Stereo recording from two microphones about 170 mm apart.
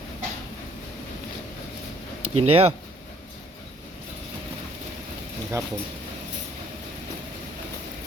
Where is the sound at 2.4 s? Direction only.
35° right (ahead or behind).